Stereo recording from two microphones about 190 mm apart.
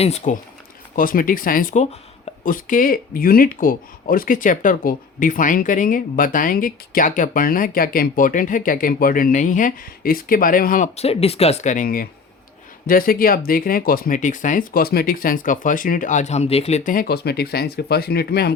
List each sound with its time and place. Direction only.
0.0 s speech: 35° left (ahead or behind)
0.9 s speech: 45° left (ahead or behind)